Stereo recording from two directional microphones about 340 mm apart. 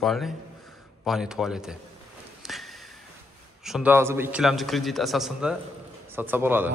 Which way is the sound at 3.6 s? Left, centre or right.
Centre.